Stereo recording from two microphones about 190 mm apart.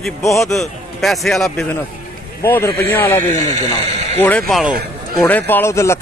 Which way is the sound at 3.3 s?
40° right (ahead or behind).